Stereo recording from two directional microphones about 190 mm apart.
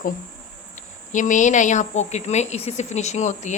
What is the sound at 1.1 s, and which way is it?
A woman's voice, 40° left (ahead or behind).